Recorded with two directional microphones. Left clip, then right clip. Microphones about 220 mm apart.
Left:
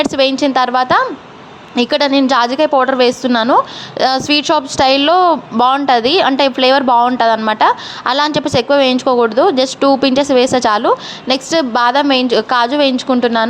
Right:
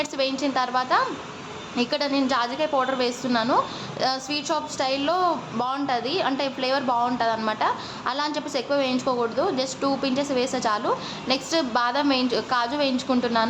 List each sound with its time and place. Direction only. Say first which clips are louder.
0.0 s a woman's voice: left 12 dB; 35° left (ahead or behind)